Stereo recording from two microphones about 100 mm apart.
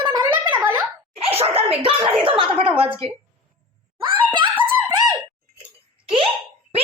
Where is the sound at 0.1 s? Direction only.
50° right (ahead or behind).